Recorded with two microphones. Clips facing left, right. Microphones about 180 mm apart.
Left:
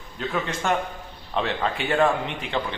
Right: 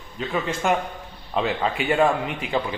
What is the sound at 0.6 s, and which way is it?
A man's voice, 5° right (ahead or behind).